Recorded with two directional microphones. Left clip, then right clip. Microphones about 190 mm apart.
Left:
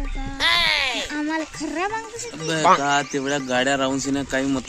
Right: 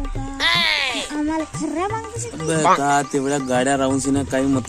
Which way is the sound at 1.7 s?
10° left (ahead or behind).